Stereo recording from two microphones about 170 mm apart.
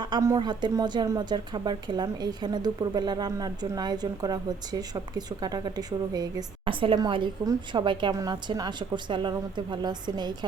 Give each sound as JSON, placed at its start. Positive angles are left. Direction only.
{"t": 0.0, "sound": "speech", "side_deg": -25}